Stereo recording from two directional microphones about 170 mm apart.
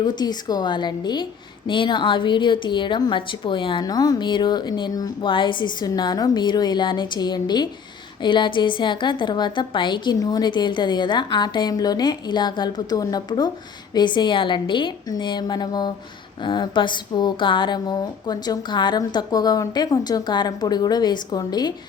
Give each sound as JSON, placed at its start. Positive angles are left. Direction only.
{"t": 0.0, "sound": "a woman's voice", "side_deg": 25}